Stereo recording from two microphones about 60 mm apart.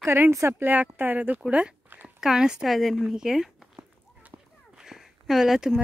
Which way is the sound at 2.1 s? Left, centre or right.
Centre.